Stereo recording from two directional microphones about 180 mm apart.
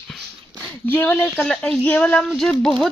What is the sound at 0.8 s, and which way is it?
Speech, 10° left (ahead or behind).